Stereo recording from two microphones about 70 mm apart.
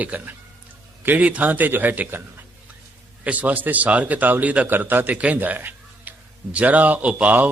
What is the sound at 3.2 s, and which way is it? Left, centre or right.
Speech, right.